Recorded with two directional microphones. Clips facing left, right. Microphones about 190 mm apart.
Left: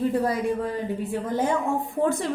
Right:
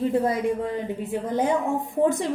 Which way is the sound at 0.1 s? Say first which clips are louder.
Right 1 dB; 20° right (ahead or behind).